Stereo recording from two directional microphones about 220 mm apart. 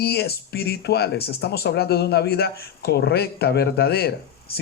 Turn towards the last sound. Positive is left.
turn(degrees=45)  # may be behind; listen again after turning